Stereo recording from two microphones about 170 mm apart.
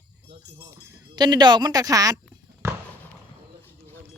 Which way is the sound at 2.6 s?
15° right (ahead or behind).